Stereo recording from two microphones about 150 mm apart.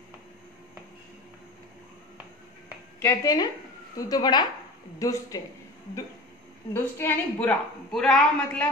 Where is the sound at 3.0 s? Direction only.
20° left (ahead or behind).